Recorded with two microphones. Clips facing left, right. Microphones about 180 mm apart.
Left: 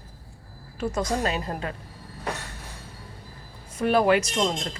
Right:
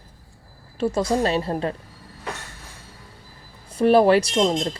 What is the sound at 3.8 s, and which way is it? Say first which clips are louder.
A woman's voice: right 5 dB; 35° right (ahead or behind).